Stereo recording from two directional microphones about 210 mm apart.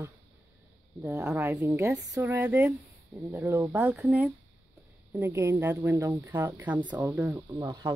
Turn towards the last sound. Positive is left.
turn(degrees=-5)  # may be behind; listen again after turning